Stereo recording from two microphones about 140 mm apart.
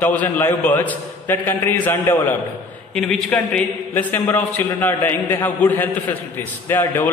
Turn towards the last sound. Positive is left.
turn(degrees=15)  # may be behind; listen again after turning